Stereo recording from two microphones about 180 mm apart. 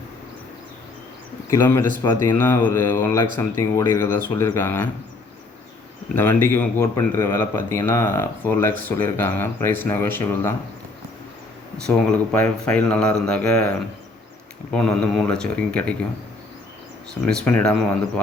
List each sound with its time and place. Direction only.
1.5 s speech: 15° left (ahead or behind)
6.1 s speech: 10° left (ahead or behind)
11.9 s speech: 5° left (ahead or behind)
17.2 s speech: 5° left (ahead or behind)